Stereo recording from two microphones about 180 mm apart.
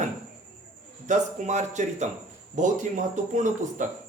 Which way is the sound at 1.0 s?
40° right (ahead or behind).